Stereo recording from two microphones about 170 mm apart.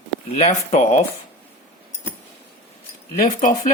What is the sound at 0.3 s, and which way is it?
Speech, 40° left (ahead or behind).